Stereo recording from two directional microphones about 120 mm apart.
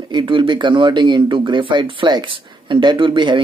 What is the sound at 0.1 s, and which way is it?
Speech, 40° right (ahead or behind).